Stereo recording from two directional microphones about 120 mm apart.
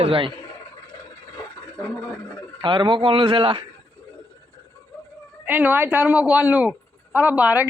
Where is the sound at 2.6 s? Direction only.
40° right (ahead or behind).